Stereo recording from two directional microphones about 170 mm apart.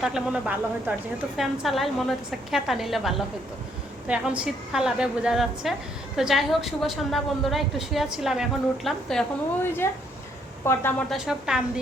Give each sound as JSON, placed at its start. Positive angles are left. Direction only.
{"t": 0.0, "sound": "a woman's voice", "side_deg": -5}
{"t": 9.6, "sound": "a woman's voice", "side_deg": 15}
{"t": 11.1, "sound": "a woman's voice", "side_deg": -5}